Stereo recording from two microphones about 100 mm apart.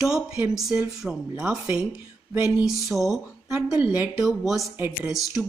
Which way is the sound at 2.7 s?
Centre (ahead or behind).